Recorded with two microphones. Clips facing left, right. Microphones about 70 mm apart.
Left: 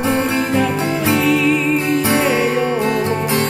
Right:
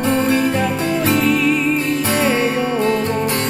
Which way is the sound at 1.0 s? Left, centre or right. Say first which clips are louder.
Left 1 dB; centre.